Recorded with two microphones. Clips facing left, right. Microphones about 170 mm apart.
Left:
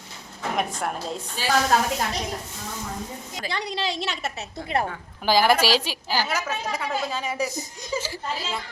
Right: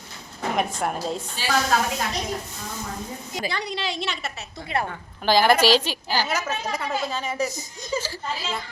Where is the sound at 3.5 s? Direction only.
30° left (ahead or behind).